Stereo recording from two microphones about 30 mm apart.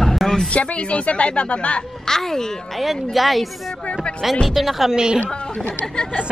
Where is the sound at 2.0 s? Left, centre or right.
Centre.